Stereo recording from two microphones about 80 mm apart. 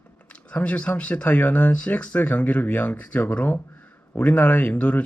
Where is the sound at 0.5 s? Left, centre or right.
Centre.